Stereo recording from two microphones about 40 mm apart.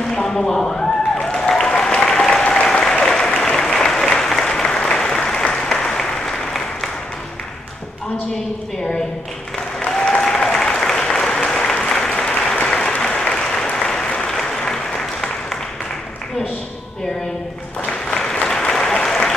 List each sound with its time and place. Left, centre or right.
0.1 s a sound: centre
1.5 s applause: centre
9.8 s applause: centre
18.0 s applause: centre